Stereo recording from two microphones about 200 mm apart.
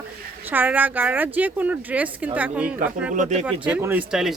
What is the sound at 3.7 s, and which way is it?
Speech, 10° right (ahead or behind).